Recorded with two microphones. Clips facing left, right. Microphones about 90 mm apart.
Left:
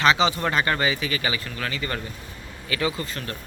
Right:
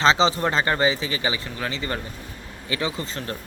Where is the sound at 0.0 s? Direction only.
30° right (ahead or behind).